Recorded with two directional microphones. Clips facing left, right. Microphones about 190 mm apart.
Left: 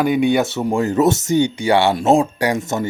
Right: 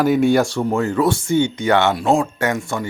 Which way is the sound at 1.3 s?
40° left (ahead or behind).